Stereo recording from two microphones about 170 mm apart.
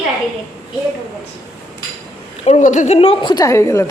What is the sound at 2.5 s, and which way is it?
A woman's voice, 45° left (ahead or behind).